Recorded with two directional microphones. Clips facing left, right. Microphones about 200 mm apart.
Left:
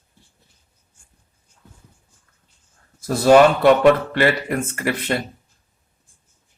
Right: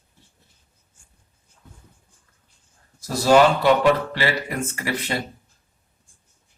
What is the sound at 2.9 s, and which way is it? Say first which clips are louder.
Speech: left 4 dB; 55° left (ahead or behind).